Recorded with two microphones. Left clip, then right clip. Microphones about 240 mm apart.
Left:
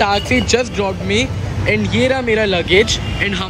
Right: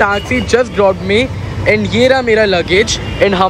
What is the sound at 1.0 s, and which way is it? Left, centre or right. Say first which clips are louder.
Speech: right 5 dB; right.